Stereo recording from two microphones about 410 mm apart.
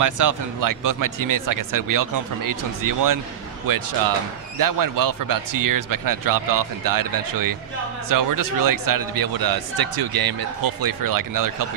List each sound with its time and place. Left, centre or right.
0.0 s a man's voice: right